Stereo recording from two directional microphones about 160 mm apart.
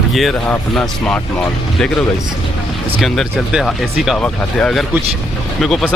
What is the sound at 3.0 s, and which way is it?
Speech, centre (ahead or behind).